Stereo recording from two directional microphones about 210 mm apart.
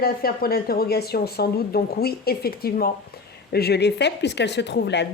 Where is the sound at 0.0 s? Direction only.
45° left (ahead or behind).